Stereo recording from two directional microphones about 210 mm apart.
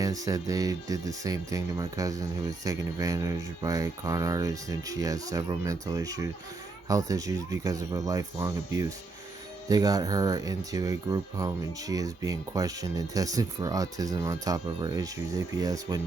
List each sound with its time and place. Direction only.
0.0 s speech: 15° right (ahead or behind)